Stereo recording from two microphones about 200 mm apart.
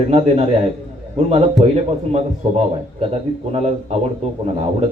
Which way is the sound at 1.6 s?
30° right (ahead or behind).